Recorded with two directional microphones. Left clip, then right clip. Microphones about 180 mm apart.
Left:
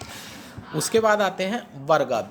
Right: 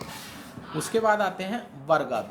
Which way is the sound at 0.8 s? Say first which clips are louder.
Left 3 dB; 50° left (ahead or behind).